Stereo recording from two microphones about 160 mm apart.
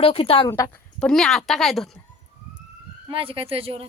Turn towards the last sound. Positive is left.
turn(degrees=-35)  # may be behind; listen again after turning